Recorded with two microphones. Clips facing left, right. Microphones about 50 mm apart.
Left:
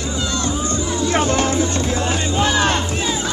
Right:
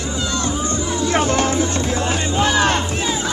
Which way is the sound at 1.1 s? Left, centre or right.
Right.